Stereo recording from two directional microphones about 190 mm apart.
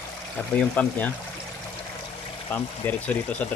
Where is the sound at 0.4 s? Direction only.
10° left (ahead or behind).